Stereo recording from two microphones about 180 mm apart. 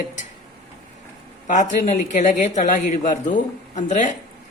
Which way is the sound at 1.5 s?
45° left (ahead or behind).